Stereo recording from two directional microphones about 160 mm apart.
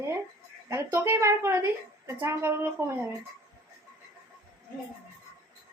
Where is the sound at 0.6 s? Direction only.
15° right (ahead or behind).